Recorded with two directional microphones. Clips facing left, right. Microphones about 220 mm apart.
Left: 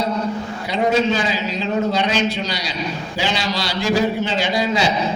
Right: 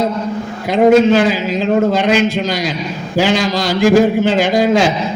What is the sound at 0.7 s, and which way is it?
A man's voice, 55° right (ahead or behind).